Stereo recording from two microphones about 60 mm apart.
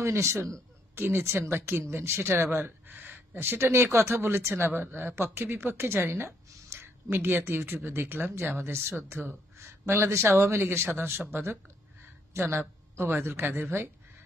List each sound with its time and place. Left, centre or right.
0.0 s speech: right
2.6 s a sound: right
3.3 s speech: right
9.6 s speech: right